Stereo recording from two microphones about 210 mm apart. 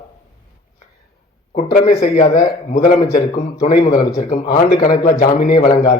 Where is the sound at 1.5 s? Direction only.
40° left (ahead or behind).